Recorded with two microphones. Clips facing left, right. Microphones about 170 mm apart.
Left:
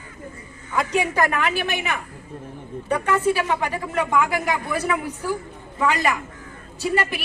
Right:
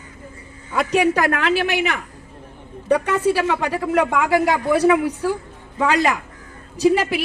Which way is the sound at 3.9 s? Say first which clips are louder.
Right 4 dB; 90° right.